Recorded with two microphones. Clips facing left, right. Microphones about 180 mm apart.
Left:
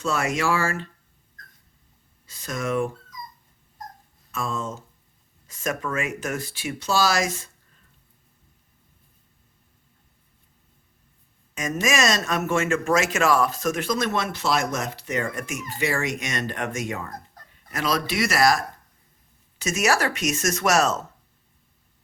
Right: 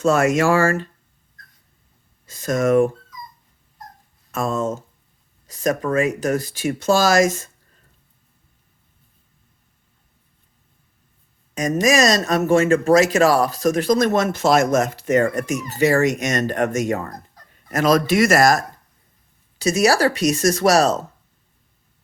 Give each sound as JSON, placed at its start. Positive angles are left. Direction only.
{"t": 0.0, "sound": "speech", "side_deg": -45}
{"t": 2.2, "sound": "speech", "side_deg": -45}
{"t": 4.3, "sound": "speech", "side_deg": -45}
{"t": 11.5, "sound": "speech", "side_deg": -35}
{"t": 19.5, "sound": "speech", "side_deg": -35}